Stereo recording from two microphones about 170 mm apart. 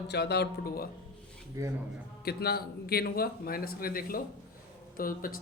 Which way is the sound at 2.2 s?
70° left (ahead or behind).